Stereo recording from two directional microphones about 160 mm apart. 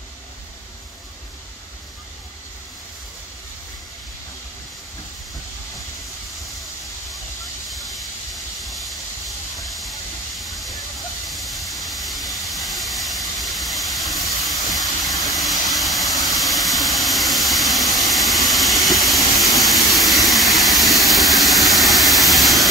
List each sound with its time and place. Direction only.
7.7 s steam: centre (ahead or behind)
11.2 s a sound: centre (ahead or behind)
15.7 s vehicle: centre (ahead or behind)